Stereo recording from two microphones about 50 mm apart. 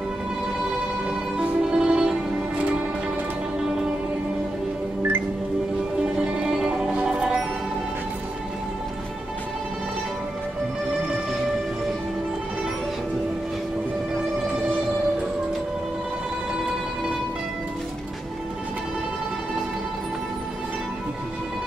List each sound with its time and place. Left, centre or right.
1.4 s music: centre
6.0 s music: centre